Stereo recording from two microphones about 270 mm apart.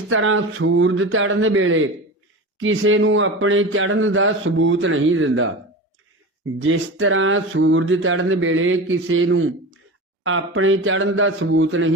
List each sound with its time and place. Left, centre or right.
0.1 s speech: right
6.6 s speech: right